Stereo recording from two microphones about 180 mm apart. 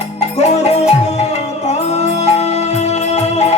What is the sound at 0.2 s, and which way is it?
Music, 40° left (ahead or behind).